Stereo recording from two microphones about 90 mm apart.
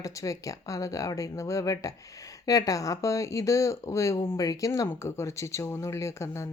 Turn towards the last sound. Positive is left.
turn(degrees=30)  # may be behind; listen again after turning